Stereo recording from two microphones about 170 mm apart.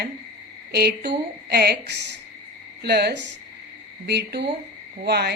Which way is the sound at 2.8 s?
75° right (ahead or behind).